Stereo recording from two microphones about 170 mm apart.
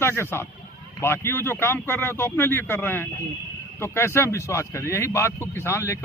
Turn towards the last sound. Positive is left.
turn(degrees=15)  # may be behind; listen again after turning